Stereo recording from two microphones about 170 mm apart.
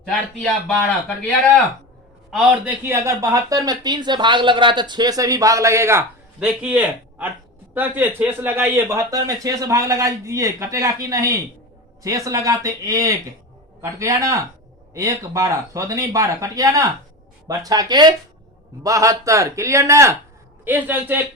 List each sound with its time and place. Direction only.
0.3 s speech: 5° left (ahead or behind)
2.6 s speech: 15° right (ahead or behind)